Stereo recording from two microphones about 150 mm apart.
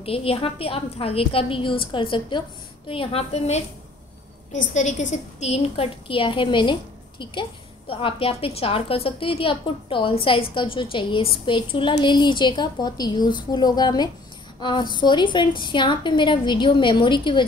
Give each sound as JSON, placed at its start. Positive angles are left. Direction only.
{"t": 0.0, "sound": "a woman's voice", "side_deg": 40}